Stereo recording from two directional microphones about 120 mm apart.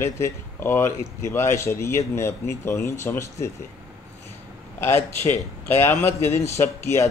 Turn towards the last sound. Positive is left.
turn(degrees=20)  # may be behind; listen again after turning